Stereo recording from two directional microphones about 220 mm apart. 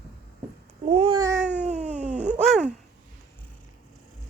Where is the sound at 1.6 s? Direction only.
35° right (ahead or behind).